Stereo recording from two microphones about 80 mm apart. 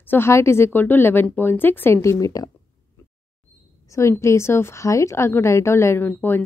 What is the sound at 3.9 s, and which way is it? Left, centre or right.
A woman's voice, left.